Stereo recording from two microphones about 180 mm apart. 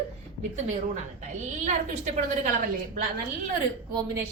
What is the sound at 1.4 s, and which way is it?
A woman's voice, 40° right (ahead or behind).